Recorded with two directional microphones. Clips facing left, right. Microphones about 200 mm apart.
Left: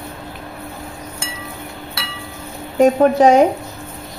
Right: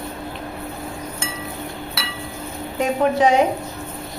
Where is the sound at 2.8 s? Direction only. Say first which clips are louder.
Left 6 dB; 45° left (ahead or behind).